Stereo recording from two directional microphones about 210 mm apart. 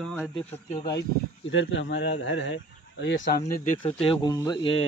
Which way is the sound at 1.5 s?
65° left (ahead or behind).